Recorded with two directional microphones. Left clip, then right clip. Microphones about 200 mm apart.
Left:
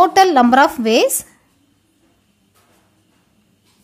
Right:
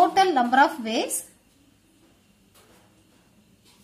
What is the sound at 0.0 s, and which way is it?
A woman's voice, 40° left (ahead or behind).